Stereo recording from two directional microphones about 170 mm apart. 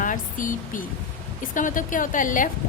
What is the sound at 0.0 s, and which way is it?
A woman's voice, 50° left (ahead or behind).